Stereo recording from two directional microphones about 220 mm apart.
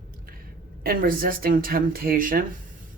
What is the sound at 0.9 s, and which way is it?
Speech, 40° right (ahead or behind).